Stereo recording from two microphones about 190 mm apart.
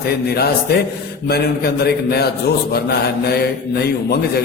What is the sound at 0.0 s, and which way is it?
A man's voice, 55° left (ahead or behind).